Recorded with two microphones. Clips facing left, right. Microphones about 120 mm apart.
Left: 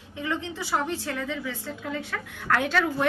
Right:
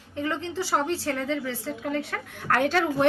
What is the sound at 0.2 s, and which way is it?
A woman's voice, 35° right (ahead or behind).